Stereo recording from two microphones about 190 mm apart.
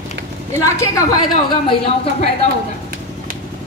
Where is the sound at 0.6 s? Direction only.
15° left (ahead or behind).